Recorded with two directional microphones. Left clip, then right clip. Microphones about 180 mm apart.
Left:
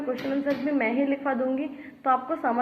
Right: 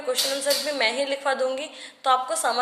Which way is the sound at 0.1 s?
40° right (ahead or behind).